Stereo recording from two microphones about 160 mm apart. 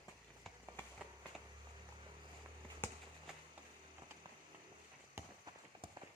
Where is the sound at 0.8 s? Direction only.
10° left (ahead or behind).